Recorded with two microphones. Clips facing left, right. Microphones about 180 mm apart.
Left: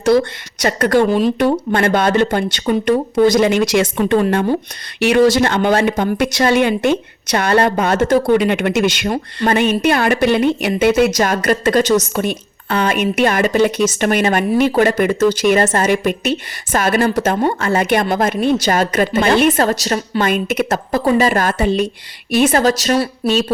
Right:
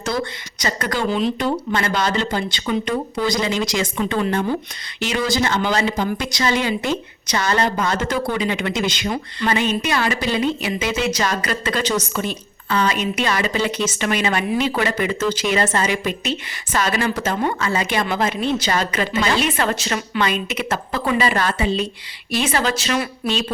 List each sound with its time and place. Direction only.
0.6 s speech: 60° left (ahead or behind)
18.0 s a woman's voice: 45° left (ahead or behind)